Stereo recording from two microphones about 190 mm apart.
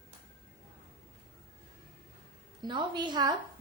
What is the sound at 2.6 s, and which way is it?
Speech, 25° right (ahead or behind).